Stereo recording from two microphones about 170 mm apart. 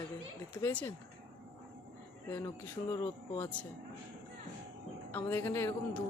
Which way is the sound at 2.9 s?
15° left (ahead or behind).